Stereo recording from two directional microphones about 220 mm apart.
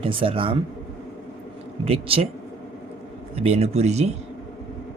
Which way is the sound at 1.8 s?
25° right (ahead or behind).